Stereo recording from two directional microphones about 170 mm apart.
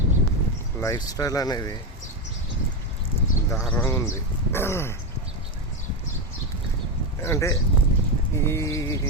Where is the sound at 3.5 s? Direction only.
15° left (ahead or behind).